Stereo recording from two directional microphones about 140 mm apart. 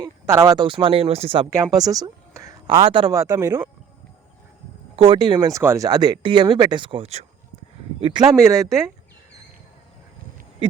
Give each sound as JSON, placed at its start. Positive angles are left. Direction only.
{"t": 0.0, "sound": "speech", "side_deg": -20}
{"t": 1.5, "sound": "speech", "side_deg": -25}
{"t": 2.6, "sound": "speech", "side_deg": -35}
{"t": 3.1, "sound": "speech", "side_deg": -25}
{"t": 4.9, "sound": "speech", "side_deg": -35}